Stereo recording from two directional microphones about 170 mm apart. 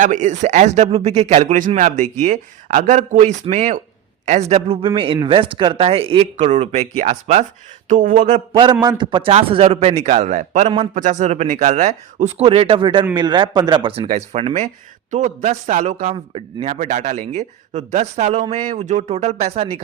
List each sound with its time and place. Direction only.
0.0 s a man's voice: 45° right (ahead or behind)
8.5 s a man's voice: 25° right (ahead or behind)
14.1 s a man's voice: 40° right (ahead or behind)